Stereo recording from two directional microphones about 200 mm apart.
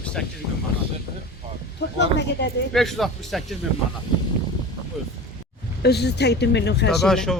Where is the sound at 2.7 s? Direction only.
Centre (ahead or behind).